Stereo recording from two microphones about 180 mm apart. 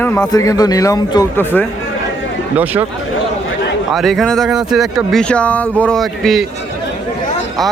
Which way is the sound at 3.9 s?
Centre (ahead or behind).